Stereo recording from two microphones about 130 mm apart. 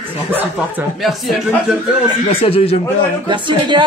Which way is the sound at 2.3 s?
45° left (ahead or behind).